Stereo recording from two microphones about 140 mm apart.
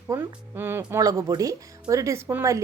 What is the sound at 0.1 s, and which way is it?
Speech, 15° right (ahead or behind).